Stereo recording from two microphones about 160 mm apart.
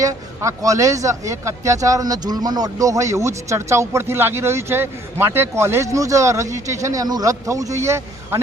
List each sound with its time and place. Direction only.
0.0 s speech: 20° right (ahead or behind)